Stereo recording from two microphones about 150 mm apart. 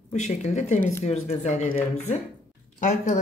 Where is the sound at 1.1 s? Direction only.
50° left (ahead or behind).